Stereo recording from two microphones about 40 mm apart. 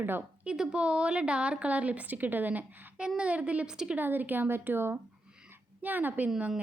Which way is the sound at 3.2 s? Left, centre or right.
Right.